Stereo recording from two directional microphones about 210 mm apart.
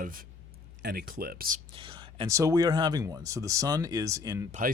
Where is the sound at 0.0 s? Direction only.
40° right (ahead or behind).